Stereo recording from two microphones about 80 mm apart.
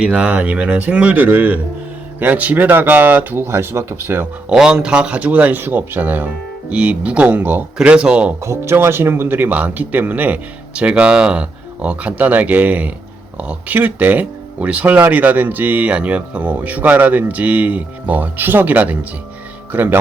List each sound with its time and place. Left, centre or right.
0.0 s speech: centre
4.4 s speech: centre
7.8 s speech: centre
8.4 s speech: right